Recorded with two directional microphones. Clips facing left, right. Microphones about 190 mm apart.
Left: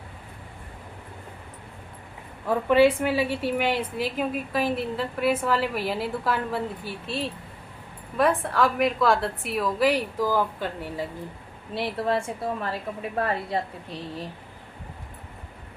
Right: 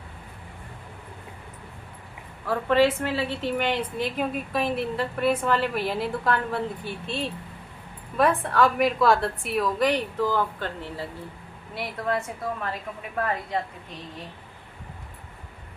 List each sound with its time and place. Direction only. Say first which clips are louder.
2.5 s a woman's voice: left 2 dB; 15° left (ahead or behind)
11.7 s a woman's voice: left 3 dB; 30° left (ahead or behind)